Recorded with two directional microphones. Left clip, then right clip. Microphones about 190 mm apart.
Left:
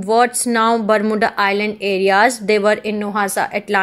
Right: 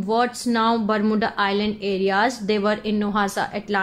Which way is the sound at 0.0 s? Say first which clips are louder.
Left 7 dB; 25° left (ahead or behind).